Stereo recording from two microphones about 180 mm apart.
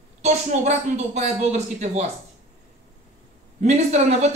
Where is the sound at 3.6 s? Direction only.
40° right (ahead or behind).